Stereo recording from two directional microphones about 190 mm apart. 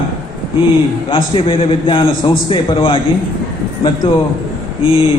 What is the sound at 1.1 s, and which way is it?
A man's voice, 30° left (ahead or behind).